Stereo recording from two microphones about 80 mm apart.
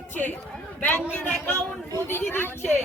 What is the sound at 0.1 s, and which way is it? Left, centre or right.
A woman's voice, left.